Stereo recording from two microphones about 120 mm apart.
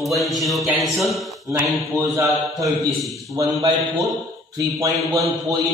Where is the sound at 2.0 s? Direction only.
30° right (ahead or behind).